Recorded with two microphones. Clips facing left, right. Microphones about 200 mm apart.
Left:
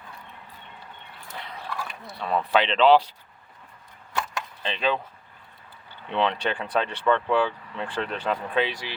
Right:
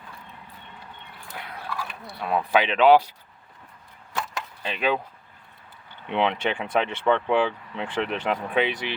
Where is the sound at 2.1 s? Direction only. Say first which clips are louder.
Right 1 dB; 10° right (ahead or behind).